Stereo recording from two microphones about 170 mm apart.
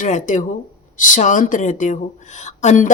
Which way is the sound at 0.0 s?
45° left (ahead or behind).